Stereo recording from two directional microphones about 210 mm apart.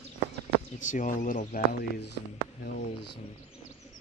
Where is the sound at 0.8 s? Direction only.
40° left (ahead or behind).